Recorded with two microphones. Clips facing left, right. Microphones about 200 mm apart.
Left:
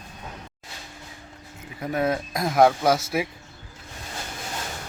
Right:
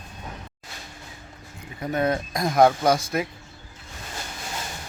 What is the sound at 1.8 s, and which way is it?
Speech, 5° left (ahead or behind).